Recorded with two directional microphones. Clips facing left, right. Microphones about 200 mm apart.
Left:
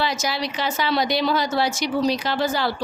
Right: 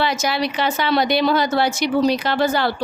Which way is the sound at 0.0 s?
60° right (ahead or behind).